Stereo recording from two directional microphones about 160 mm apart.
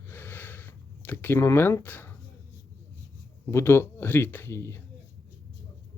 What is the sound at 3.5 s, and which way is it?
Speech, 15° left (ahead or behind).